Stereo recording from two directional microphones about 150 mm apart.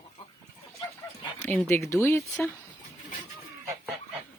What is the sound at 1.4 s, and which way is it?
Speech, 15° left (ahead or behind).